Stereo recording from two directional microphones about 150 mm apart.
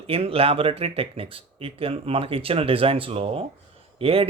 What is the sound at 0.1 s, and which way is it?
Speech, 40° right (ahead or behind).